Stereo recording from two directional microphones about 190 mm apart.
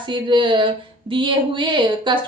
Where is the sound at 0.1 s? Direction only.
25° right (ahead or behind).